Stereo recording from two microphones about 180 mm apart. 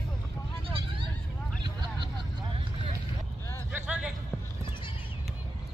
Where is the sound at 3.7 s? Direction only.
5° right (ahead or behind).